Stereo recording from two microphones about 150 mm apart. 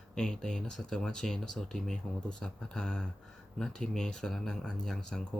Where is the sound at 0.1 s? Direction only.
5° left (ahead or behind).